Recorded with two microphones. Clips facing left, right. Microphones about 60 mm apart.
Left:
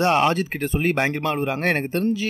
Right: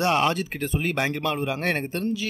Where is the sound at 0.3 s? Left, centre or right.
Left.